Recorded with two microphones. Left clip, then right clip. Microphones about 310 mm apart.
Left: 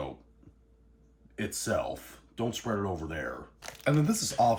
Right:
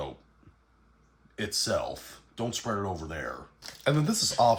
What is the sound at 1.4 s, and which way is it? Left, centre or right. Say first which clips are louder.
Speech: right 2 dB; centre.